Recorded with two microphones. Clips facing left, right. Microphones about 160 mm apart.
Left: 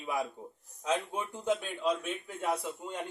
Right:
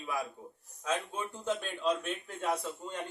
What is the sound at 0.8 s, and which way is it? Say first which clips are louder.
A man's voice: left 2 dB; 20° left (ahead or behind).